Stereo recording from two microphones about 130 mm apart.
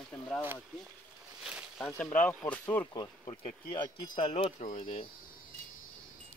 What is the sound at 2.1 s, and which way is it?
Speech, 10° left (ahead or behind).